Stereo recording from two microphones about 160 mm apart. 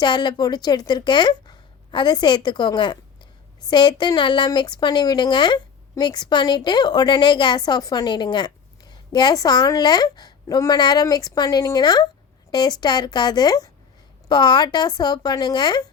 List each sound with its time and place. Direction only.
0.0 s a woman's voice: 30° left (ahead or behind)